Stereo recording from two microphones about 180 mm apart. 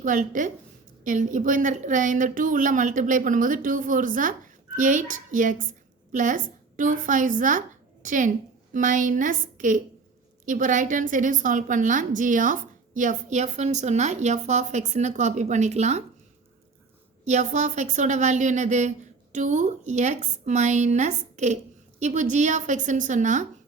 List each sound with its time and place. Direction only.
0.0 s a woman's voice: 45° right (ahead or behind)
17.2 s a woman's voice: 40° right (ahead or behind)